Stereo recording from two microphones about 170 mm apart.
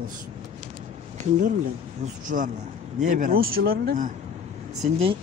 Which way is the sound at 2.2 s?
50° right (ahead or behind).